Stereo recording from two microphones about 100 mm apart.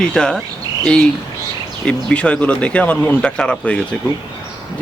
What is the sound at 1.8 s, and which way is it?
Speech, 10° left (ahead or behind).